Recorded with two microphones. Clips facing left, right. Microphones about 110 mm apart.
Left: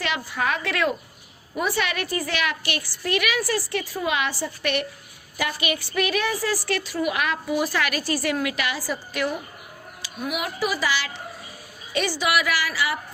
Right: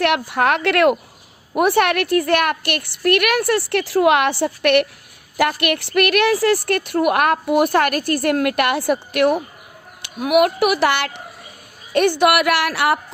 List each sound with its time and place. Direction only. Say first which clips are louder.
0.0 s a woman's voice: right 9 dB; 65° right (ahead or behind)